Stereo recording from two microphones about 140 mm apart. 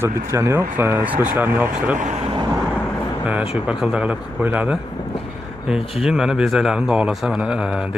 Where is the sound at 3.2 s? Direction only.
10° right (ahead or behind).